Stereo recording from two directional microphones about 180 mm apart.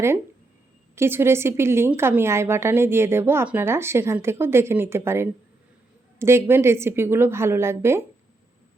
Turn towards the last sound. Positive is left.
turn(degrees=-15)  # may be behind; listen again after turning